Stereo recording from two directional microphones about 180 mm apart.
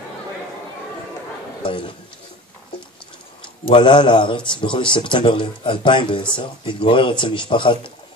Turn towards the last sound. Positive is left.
turn(degrees=25)  # may be behind; listen again after turning